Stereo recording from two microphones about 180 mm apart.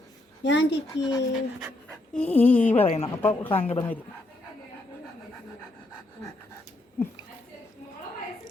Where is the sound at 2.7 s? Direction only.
35° left (ahead or behind).